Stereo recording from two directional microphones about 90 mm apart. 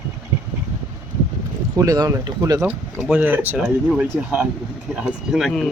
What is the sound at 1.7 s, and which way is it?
Speech, 45° right (ahead or behind).